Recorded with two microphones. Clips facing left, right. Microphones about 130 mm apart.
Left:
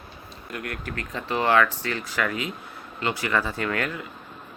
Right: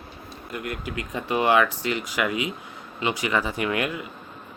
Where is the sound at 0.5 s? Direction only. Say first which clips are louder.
Right 2 dB; 5° right (ahead or behind).